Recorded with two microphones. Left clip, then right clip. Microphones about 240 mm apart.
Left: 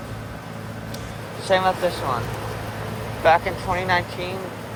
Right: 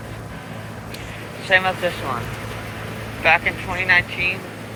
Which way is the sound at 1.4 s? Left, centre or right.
Left.